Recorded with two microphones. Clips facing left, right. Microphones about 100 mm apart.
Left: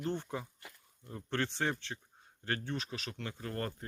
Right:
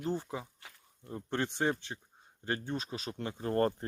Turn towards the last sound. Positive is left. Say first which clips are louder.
# right 9 dB
turn(degrees=-30)  # may be behind; listen again after turning